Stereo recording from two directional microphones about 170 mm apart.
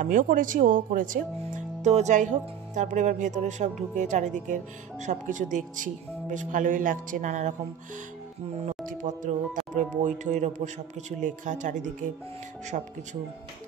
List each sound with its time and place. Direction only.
0.0 s speech: 50° right (ahead or behind)
8.8 s speech: 50° right (ahead or behind)